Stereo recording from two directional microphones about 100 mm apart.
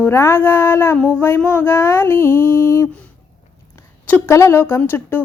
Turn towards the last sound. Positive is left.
turn(degrees=20)  # may be behind; listen again after turning